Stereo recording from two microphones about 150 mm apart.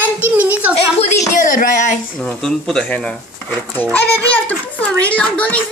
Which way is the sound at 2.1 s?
5° left (ahead or behind).